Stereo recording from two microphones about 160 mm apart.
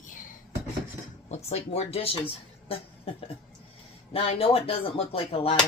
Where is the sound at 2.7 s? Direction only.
35° left (ahead or behind).